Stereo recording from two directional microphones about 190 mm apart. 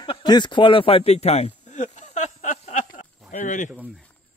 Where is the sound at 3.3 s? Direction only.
40° left (ahead or behind).